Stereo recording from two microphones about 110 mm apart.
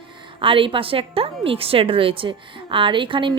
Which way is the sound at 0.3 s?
50° right (ahead or behind).